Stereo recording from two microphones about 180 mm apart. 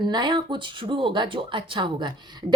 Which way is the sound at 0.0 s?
25° right (ahead or behind).